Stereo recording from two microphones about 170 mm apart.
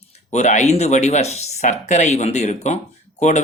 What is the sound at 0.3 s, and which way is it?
Speech, 45° left (ahead or behind).